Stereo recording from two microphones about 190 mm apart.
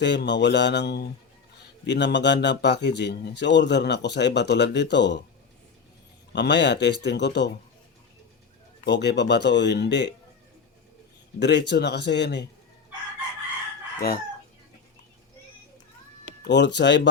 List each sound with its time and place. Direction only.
0.0 s speech: 65° left (ahead or behind)
6.3 s speech: 65° left (ahead or behind)
8.8 s speech: 60° left (ahead or behind)
11.3 s speech: 65° left (ahead or behind)
16.4 s speech: 65° left (ahead or behind)